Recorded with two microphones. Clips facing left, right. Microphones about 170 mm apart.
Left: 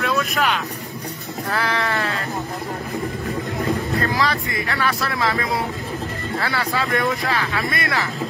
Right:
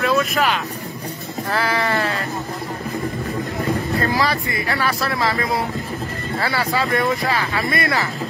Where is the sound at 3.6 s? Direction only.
Centre (ahead or behind).